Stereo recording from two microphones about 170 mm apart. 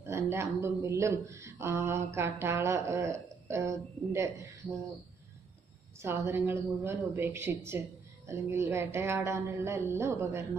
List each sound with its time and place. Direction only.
0.0 s speech: 15° right (ahead or behind)
5.9 s speech: 15° right (ahead or behind)